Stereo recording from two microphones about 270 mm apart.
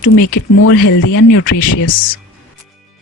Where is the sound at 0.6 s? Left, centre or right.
Left.